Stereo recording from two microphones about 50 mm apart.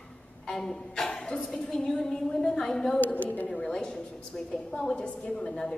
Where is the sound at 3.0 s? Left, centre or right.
Left.